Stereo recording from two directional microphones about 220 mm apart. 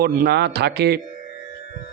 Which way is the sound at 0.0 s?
50° right (ahead or behind).